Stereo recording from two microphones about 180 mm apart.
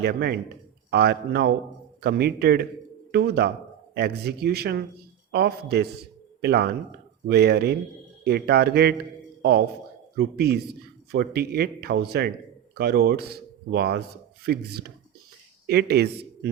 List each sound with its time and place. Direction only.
0.0 s a man's voice: 60° right (ahead or behind)